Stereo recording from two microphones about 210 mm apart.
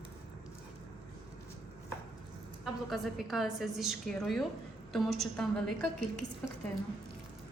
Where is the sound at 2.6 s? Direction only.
Centre (ahead or behind).